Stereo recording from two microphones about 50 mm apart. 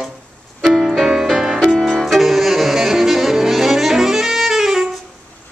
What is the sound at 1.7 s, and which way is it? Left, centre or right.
Saxophone, centre.